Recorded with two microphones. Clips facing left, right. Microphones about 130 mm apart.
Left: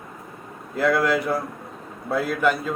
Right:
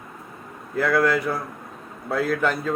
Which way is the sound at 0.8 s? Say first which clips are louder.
Even; 25° left (ahead or behind).